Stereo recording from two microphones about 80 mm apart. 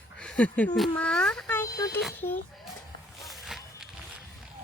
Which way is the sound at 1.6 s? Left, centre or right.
Left.